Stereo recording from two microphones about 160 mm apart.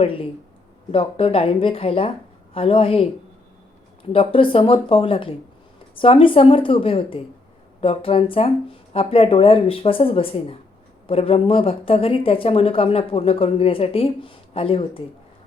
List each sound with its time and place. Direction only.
0.0 s speech: 35° left (ahead or behind)
4.1 s speech: 35° left (ahead or behind)